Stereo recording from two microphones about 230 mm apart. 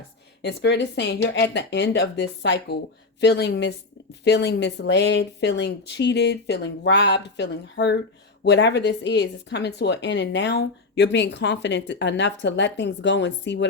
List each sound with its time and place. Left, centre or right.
0.4 s speech: left